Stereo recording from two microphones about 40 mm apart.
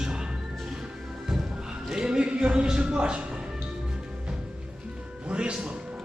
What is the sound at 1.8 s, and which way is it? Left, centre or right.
Speech, centre.